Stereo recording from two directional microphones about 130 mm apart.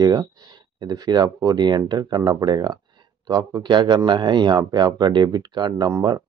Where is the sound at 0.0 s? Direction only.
30° right (ahead or behind).